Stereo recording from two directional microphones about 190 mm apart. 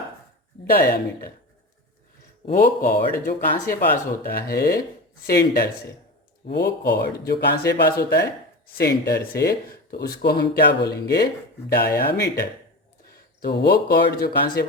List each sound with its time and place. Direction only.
0.7 s speech: 50° left (ahead or behind)
2.5 s speech: 45° left (ahead or behind)
13.4 s speech: 60° left (ahead or behind)